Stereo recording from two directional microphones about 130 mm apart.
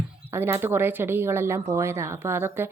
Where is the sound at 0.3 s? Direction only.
15° right (ahead or behind).